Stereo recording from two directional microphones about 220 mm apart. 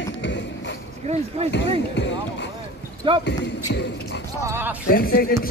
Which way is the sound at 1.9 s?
50° left (ahead or behind).